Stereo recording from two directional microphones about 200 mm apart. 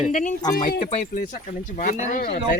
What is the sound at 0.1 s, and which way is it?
Speech, 40° left (ahead or behind).